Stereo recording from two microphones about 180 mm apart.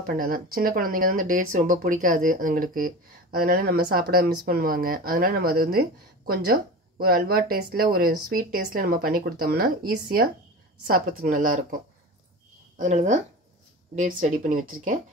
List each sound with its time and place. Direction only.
0.0 s a woman's voice: 55° right (ahead or behind)